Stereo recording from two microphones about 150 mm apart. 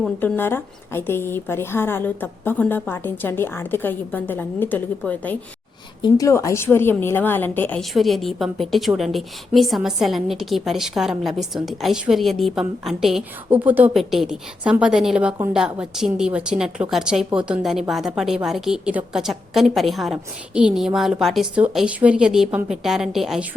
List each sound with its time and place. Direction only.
0.2 s a woman's voice: 15° left (ahead or behind)
6.0 s a woman's voice: 20° left (ahead or behind)
7.8 s a woman's voice: centre (ahead or behind)